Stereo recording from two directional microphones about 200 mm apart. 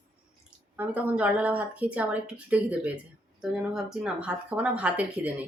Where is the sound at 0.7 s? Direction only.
10° right (ahead or behind).